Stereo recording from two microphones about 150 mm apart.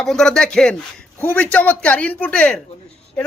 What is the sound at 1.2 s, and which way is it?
Speech, 10° left (ahead or behind).